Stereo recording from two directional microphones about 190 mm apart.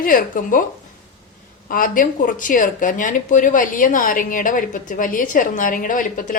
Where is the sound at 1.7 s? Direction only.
45° left (ahead or behind).